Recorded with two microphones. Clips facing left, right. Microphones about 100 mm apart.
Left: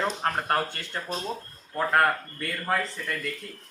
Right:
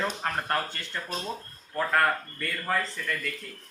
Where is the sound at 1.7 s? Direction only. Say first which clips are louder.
Left 2 dB; 15° left (ahead or behind).